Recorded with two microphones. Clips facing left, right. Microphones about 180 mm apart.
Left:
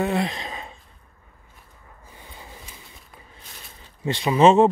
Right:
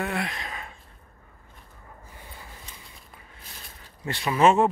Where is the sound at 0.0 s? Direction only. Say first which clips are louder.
Left 6 dB; 25° left (ahead or behind).